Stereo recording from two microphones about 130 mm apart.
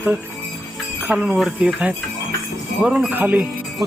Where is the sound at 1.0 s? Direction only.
10° right (ahead or behind).